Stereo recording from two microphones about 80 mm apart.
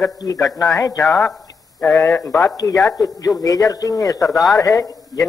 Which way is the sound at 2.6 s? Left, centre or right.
Left.